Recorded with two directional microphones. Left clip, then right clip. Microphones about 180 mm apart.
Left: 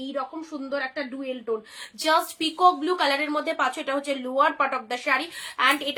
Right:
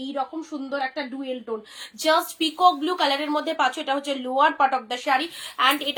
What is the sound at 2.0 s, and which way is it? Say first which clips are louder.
A woman's voice: right 1 dB; 20° left (ahead or behind).